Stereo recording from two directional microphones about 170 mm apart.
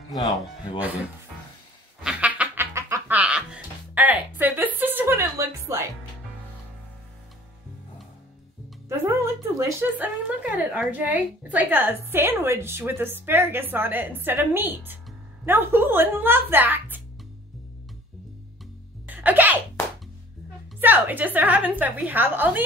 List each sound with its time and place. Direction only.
2.0 s music: 5° right (ahead or behind)
8.8 s a woman's voice: 15° right (ahead or behind)
19.0 s sneeze: 10° right (ahead or behind)
20.8 s a woman's voice: 10° right (ahead or behind)